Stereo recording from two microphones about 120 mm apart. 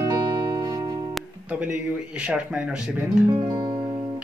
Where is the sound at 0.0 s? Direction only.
30° right (ahead or behind).